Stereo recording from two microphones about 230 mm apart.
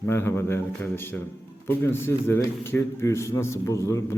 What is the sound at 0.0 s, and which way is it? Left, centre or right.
A man's voice, centre.